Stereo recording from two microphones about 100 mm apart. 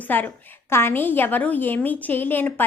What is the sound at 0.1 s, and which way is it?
Speech, 20° left (ahead or behind).